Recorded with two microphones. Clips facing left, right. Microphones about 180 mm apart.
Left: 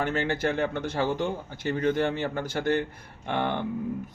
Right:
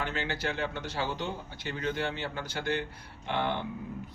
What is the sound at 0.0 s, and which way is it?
A man's voice, 50° left (ahead or behind).